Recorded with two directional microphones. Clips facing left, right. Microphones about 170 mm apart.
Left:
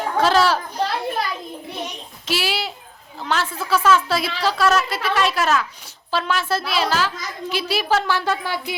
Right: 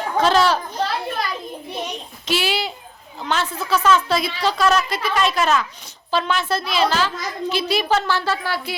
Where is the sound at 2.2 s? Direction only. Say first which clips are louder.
Right 2 dB; 5° left (ahead or behind).